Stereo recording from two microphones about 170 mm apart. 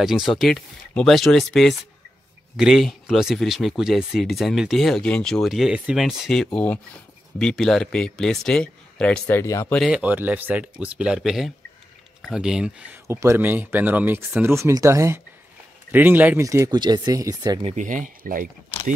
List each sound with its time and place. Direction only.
0.0 s speech: centre (ahead or behind)
9.4 s speech: 15° left (ahead or behind)
9.8 s speech: 5° right (ahead or behind)
13.0 s speech: 15° right (ahead or behind)
17.6 s speech: 50° right (ahead or behind)